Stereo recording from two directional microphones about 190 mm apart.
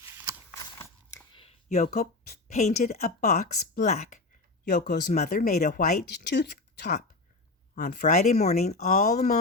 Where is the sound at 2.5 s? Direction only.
35° left (ahead or behind).